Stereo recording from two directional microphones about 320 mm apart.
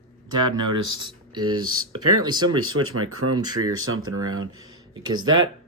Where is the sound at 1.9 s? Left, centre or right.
Centre.